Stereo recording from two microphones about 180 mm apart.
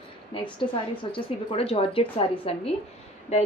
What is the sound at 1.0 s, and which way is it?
A woman's voice, 30° left (ahead or behind).